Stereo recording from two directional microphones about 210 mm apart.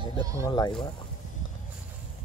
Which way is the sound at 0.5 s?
20° left (ahead or behind).